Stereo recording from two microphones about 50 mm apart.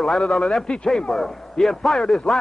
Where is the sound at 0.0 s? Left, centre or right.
Centre.